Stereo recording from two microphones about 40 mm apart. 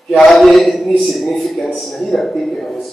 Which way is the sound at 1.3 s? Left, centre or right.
Centre.